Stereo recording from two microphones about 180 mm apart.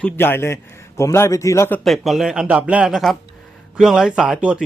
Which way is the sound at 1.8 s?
Centre (ahead or behind).